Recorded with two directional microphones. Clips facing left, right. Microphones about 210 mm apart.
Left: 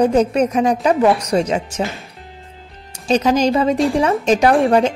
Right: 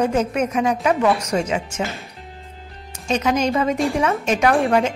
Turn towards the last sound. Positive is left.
turn(degrees=35)  # may be behind; listen again after turning